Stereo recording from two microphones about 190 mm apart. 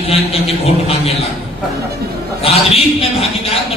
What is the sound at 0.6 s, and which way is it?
Speech, 30° left (ahead or behind).